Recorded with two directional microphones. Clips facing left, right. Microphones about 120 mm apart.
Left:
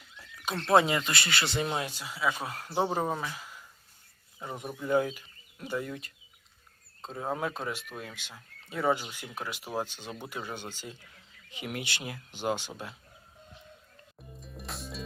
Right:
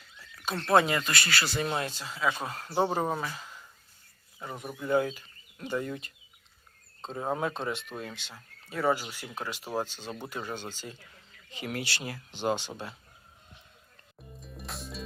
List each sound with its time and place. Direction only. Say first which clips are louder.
0.6 s speech: even; 20° left (ahead or behind)
1.6 s speech: right 1 dB; 10° left (ahead or behind)
3.3 s a sound: right 1 dB; 10° left (ahead or behind)
4.4 s speech: left 1 dB; 15° left (ahead or behind)
9.2 s speech: right 1 dB; 15° right (ahead or behind)
9.5 s speech: right 2 dB; 10° left (ahead or behind)
14.2 s music: right 1 dB; centre (ahead or behind)